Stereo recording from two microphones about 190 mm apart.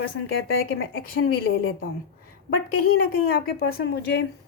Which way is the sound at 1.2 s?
65° left (ahead or behind).